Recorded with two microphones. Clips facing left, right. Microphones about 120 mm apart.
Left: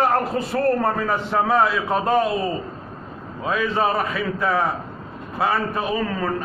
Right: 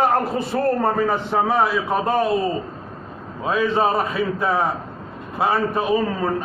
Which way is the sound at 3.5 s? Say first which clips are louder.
Right 2 dB; 30° right (ahead or behind).